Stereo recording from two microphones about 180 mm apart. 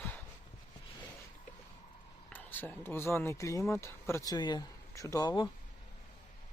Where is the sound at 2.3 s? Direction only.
10° left (ahead or behind).